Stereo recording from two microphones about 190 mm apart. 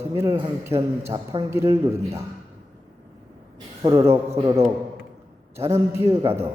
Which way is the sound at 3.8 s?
20° right (ahead or behind).